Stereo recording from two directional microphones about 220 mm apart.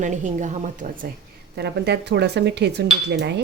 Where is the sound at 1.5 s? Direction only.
50° right (ahead or behind).